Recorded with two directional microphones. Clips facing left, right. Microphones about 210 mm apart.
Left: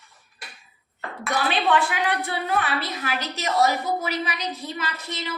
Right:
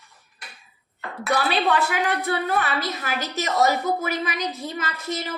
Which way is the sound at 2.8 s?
45° right (ahead or behind).